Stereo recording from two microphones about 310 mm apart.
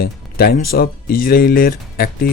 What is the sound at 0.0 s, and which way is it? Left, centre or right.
Speech, left.